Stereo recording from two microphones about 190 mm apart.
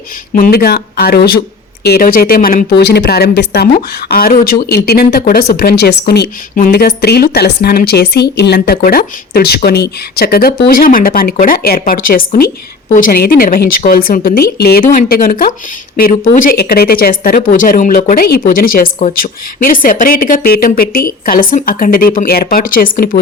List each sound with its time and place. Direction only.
0.3 s speech: 50° left (ahead or behind)